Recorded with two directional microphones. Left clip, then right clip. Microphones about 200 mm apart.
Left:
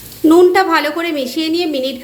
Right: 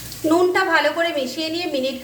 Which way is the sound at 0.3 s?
40° left (ahead or behind).